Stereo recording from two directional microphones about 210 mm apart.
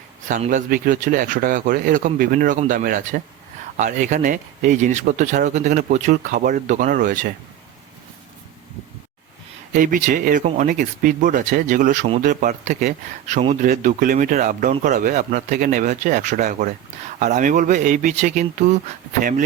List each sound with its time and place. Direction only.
0.3 s speech: 35° right (ahead or behind)
9.7 s speech: 40° right (ahead or behind)